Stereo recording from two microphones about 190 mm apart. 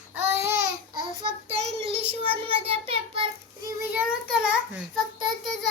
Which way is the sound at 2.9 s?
30° right (ahead or behind).